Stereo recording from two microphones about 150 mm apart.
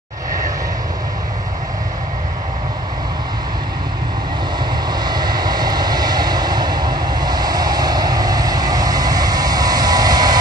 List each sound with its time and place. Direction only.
5.0 s vehicle: 25° right (ahead or behind)